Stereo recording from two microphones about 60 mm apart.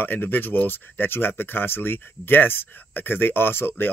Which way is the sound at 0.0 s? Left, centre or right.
Left.